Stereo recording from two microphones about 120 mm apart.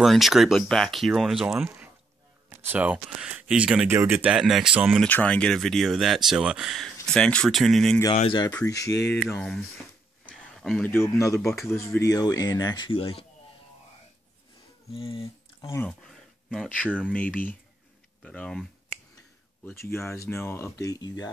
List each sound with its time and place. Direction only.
0.0 s speech: centre (ahead or behind)
2.6 s speech: 15° right (ahead or behind)
5.0 s speech: 10° left (ahead or behind); by 6.9 s 5° right (ahead or behind)
7.1 s speech: 5° left (ahead or behind)
8.1 s speech: 50° left (ahead or behind)
8.6 s speech: 30° left (ahead or behind)
10.3 s a sound: centre (ahead or behind)
10.8 s speech: 20° left (ahead or behind); by 13.2 s 50° left (ahead or behind)
14.9 s speech: 50° left (ahead or behind)
15.9 s speech: 5° left (ahead or behind)
19.7 s speech: 20° left (ahead or behind)